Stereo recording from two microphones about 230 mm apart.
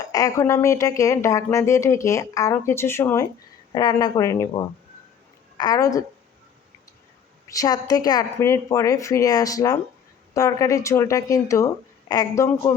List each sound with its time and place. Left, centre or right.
0.0 s a woman's voice: centre
7.4 s speech: centre